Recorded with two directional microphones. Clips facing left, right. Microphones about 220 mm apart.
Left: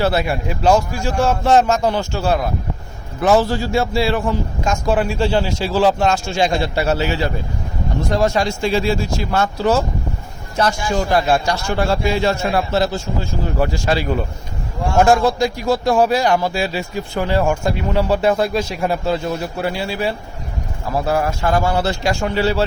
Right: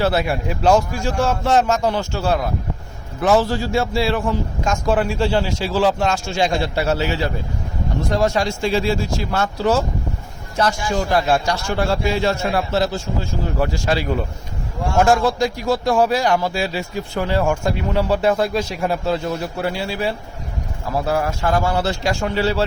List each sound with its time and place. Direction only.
0.0 s a man's voice: centre (ahead or behind)
1.1 s a man's voice: 15° left (ahead or behind)
5.2 s a man's voice: 25° left (ahead or behind)
11.2 s a man's voice: 10° left (ahead or behind)
13.8 s a man's voice: 30° left (ahead or behind)
14.9 s a man's voice: 15° left (ahead or behind)